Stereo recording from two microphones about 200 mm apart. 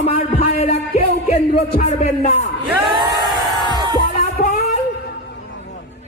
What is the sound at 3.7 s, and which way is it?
Music, 20° right (ahead or behind).